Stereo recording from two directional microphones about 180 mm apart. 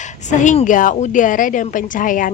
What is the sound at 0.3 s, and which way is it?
Speech, 45° left (ahead or behind).